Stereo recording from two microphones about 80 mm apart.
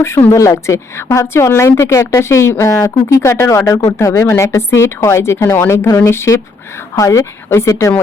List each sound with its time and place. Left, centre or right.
0.0 s a woman's voice: left
2.7 s a woman's voice: left
6.9 s a woman's voice: left